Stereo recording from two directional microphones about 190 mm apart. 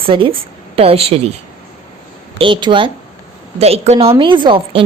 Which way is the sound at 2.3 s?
25° right (ahead or behind).